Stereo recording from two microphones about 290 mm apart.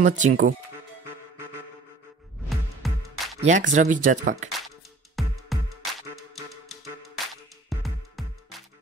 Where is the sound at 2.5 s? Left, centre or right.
Centre.